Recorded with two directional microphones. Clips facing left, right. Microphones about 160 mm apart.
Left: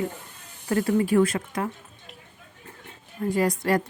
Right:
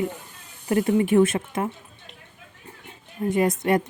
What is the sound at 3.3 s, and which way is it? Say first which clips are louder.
Speech: right 2 dB; 20° right (ahead or behind).